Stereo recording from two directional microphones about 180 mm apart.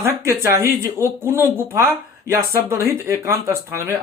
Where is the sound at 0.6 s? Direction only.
15° right (ahead or behind).